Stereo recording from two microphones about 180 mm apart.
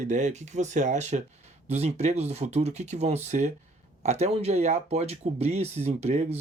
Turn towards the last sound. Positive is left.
turn(degrees=-35)  # may be behind; listen again after turning